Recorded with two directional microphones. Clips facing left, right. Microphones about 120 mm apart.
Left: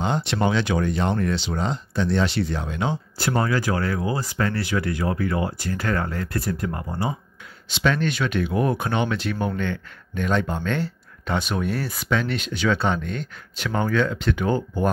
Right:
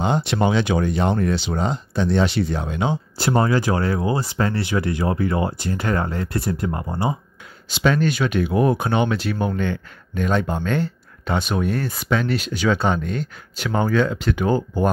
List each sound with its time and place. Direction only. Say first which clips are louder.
0.0 s speech: right 3 dB; 15° right (ahead or behind)
7.6 s speech: right 3 dB; 5° right (ahead or behind)